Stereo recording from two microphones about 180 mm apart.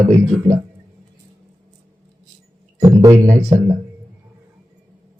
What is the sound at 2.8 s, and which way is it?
Speech, 15° right (ahead or behind).